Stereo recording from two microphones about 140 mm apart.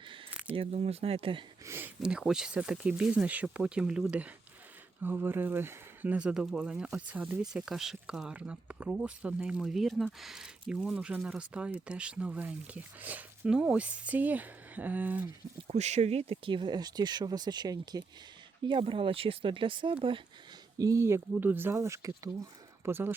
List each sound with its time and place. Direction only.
0.5 s speech: 45° right (ahead or behind)
1.6 s a sound: 15° right (ahead or behind)
2.0 s speech: 5° right (ahead or behind)
15.6 s speech: 55° right (ahead or behind); by 20.2 s 35° right (ahead or behind)
20.7 s speech: 25° right (ahead or behind)